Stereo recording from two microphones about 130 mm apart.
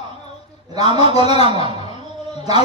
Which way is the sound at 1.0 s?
50° left (ahead or behind).